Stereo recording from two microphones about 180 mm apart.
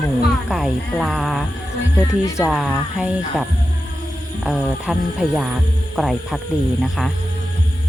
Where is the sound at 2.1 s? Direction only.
15° left (ahead or behind).